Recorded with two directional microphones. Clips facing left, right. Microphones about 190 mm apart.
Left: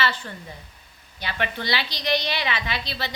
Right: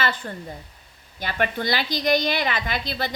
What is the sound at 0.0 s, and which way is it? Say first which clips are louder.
A woman's voice: right 1 dB; 50° right (ahead or behind).